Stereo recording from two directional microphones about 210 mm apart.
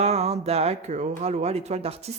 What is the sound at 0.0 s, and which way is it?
Speech, 30° right (ahead or behind).